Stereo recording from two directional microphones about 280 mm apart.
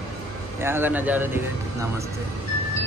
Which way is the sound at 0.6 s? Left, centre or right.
Centre.